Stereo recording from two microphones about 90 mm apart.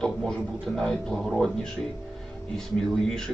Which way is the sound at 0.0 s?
5° left (ahead or behind).